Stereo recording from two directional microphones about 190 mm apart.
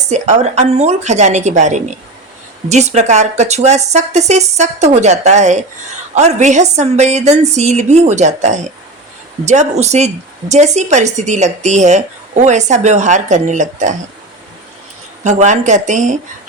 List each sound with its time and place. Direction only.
0.1 s a woman's voice: 35° right (ahead or behind)
15.2 s a woman's voice: 40° right (ahead or behind)